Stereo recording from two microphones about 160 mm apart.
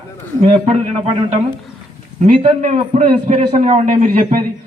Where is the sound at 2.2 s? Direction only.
40° right (ahead or behind).